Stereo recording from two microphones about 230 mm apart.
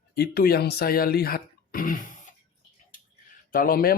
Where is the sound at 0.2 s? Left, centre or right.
Left.